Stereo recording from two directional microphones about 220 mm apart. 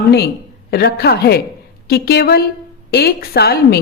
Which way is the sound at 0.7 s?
45° left (ahead or behind).